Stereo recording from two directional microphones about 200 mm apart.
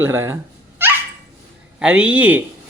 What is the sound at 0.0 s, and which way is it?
Speech, 15° right (ahead or behind).